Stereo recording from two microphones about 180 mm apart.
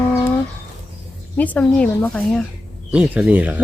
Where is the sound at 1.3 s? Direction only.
10° left (ahead or behind).